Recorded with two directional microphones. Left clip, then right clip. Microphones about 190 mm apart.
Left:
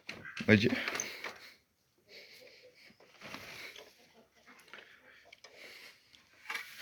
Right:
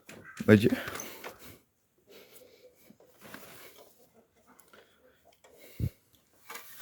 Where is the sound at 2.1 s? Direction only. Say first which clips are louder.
Left 1 dB; 45° right (ahead or behind).